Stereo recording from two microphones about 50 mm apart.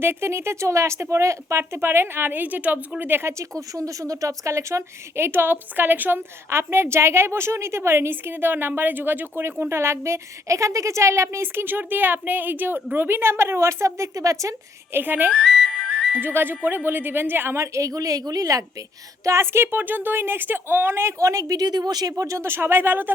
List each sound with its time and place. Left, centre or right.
0.0 s speech: right
3.2 s a woman's voice: right
5.1 s speech: right
8.1 s speech: right
11.6 s a woman's voice: right
14.9 s speech: right
15.3 s speech: centre
15.5 s whistle: centre
16.2 s a woman's voice: right
19.3 s a woman's voice: right